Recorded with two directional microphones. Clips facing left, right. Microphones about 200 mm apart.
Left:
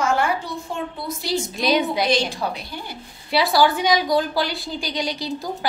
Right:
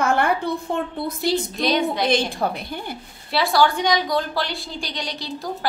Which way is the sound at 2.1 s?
55° right (ahead or behind).